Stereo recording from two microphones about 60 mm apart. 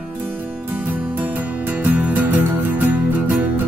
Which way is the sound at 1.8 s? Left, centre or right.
Right.